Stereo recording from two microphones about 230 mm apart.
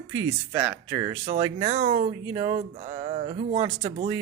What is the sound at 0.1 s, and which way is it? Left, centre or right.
Speech, right.